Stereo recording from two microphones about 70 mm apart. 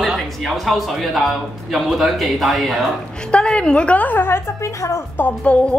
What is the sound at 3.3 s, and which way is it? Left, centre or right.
A woman's voice, centre.